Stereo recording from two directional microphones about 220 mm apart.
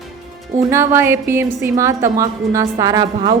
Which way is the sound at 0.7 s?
10° right (ahead or behind).